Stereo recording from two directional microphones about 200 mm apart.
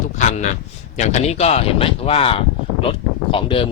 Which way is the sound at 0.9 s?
35° left (ahead or behind).